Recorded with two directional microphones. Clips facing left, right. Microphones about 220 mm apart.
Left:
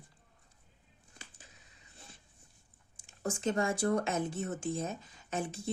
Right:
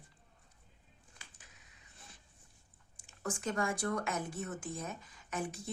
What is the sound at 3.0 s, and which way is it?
Speech, 25° left (ahead or behind).